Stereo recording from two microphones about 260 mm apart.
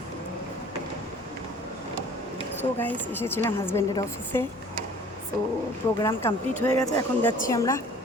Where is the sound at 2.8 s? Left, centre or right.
Centre.